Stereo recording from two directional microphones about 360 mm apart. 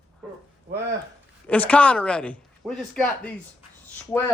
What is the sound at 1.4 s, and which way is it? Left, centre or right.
Speech, centre.